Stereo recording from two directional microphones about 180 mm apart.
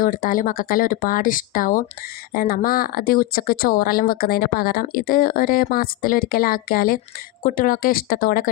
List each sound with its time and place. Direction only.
0.0 s speech: 50° left (ahead or behind)